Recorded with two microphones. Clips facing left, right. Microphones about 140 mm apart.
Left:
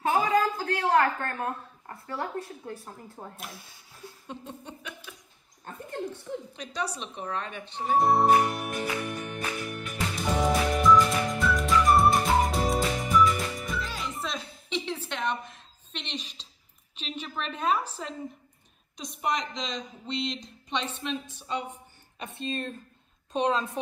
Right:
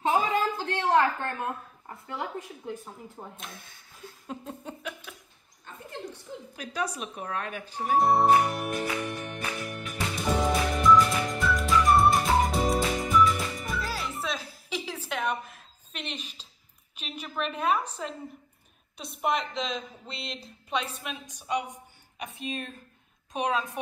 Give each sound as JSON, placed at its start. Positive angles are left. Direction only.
{"t": 0.0, "sound": "a woman's voice", "side_deg": -25}
{"t": 2.8, "sound": "speech", "side_deg": 5}
{"t": 7.0, "sound": "a woman's voice", "side_deg": -5}
{"t": 7.9, "sound": "music", "side_deg": 0}
{"t": 17.0, "sound": "a woman's voice", "side_deg": -5}
{"t": 18.9, "sound": "a woman's voice", "side_deg": -5}